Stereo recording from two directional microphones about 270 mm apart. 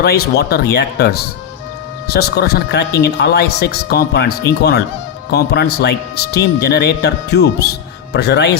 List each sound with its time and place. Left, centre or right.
0.0 s speech: left